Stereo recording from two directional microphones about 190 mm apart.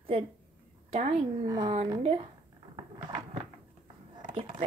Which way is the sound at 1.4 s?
20° right (ahead or behind).